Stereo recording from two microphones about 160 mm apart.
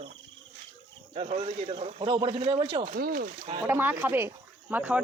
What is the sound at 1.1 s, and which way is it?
A man's voice, 40° right (ahead or behind).